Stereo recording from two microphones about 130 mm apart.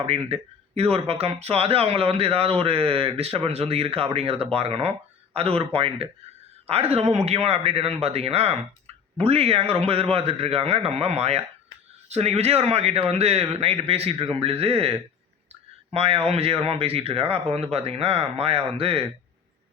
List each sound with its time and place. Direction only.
0.0 s speech: 50° right (ahead or behind)